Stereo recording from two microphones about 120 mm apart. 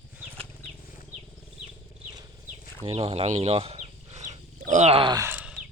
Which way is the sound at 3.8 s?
65° right (ahead or behind).